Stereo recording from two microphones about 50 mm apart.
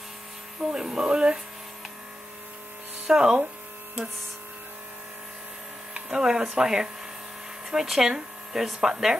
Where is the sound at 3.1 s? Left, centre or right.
Centre.